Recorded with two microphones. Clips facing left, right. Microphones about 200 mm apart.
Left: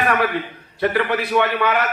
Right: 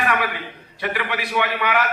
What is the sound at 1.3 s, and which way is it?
Speech, 55° left (ahead or behind).